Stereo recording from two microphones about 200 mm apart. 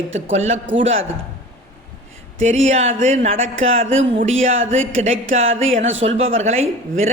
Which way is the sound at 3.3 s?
80° right.